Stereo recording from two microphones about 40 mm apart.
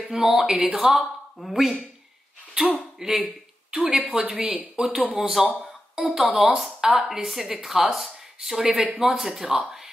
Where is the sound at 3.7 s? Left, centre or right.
Right.